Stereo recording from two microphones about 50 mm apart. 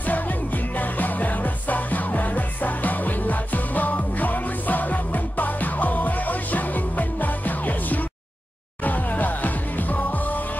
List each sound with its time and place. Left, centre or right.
0.7 s music: left